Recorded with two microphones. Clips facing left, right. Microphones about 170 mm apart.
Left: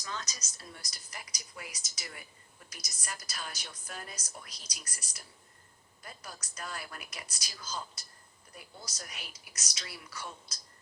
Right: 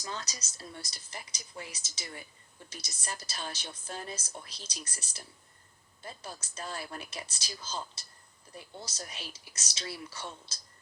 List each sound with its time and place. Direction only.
0.0 s a woman's voice: 30° right (ahead or behind)